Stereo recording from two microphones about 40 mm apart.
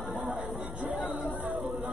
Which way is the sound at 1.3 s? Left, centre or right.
Right.